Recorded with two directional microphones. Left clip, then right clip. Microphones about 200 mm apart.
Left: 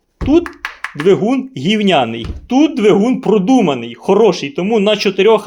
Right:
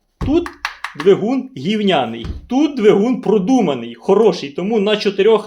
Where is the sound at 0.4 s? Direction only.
5° left (ahead or behind).